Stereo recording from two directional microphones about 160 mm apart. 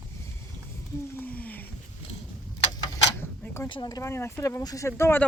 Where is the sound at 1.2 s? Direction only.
10° left (ahead or behind).